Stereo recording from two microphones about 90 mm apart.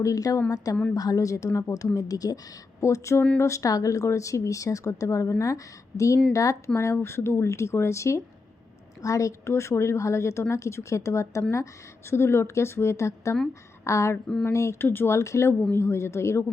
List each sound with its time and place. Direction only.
0.0 s speech: 40° left (ahead or behind)
6.3 s a woman's voice: 40° left (ahead or behind)